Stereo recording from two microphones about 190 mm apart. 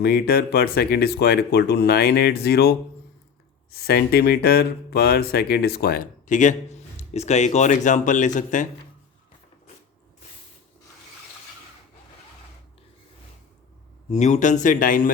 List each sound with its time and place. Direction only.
0.0 s speech: 55° left (ahead or behind)
14.1 s speech: 40° left (ahead or behind)